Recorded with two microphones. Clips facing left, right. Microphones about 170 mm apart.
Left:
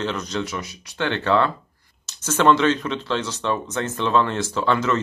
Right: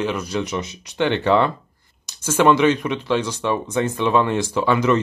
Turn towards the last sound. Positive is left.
turn(degrees=-15)  # may be behind; listen again after turning